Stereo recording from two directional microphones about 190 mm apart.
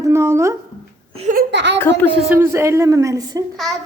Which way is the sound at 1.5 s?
65° right (ahead or behind).